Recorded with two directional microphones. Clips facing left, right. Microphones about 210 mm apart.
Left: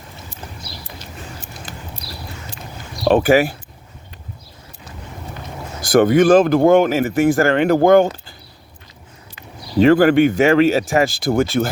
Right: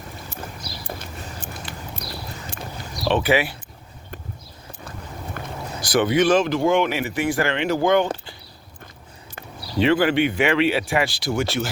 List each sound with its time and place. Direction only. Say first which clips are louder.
3.1 s speech: left 7 dB; 40° left (ahead or behind)
5.4 s a sound: right 1 dB; 55° right (ahead or behind)
5.9 s speech: left 6 dB; 50° left (ahead or behind)
6.7 s speech: left 7 dB; 40° left (ahead or behind)
9.8 s speech: left 7 dB; 45° left (ahead or behind)